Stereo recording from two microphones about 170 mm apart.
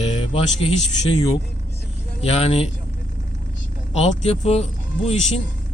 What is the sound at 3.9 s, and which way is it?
Speech, 40° left (ahead or behind).